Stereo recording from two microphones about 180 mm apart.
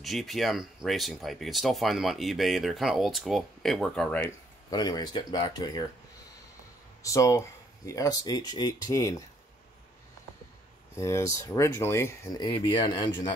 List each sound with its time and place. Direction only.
0.0 s speech: centre (ahead or behind)
4.6 s speech: 20° left (ahead or behind)
7.0 s speech: 20° left (ahead or behind)
11.0 s speech: 15° left (ahead or behind)